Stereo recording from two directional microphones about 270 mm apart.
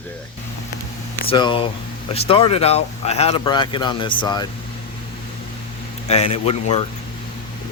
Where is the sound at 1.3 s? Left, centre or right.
Centre.